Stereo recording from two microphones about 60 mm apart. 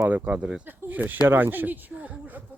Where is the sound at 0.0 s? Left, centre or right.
Right.